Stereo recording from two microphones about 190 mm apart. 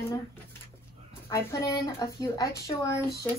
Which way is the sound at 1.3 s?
15° left (ahead or behind).